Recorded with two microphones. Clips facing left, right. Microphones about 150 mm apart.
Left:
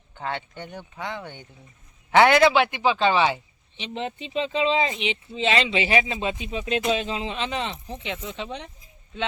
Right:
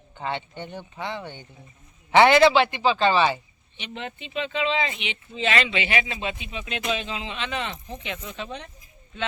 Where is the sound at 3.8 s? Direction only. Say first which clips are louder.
Left 4 dB; 30° left (ahead or behind).